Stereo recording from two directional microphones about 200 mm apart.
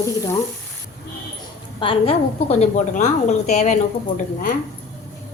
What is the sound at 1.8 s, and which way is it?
A woman's voice, 25° left (ahead or behind).